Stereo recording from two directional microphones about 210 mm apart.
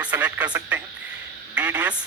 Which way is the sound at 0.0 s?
5° right (ahead or behind).